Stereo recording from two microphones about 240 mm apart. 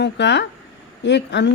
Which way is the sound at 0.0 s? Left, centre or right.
Left.